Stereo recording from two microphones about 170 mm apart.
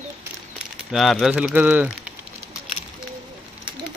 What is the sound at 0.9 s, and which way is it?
Speech, centre (ahead or behind).